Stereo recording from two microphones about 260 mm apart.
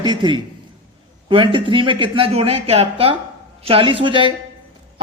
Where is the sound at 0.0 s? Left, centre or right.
Centre.